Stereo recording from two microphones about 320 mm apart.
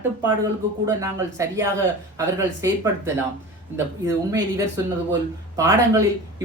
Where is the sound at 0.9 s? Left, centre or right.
Centre.